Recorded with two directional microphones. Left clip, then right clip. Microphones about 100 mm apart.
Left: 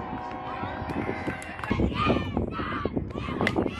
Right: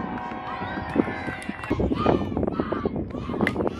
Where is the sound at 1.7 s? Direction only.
35° left (ahead or behind).